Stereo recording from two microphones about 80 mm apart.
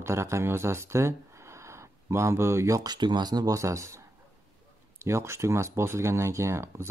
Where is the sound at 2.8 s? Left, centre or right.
Right.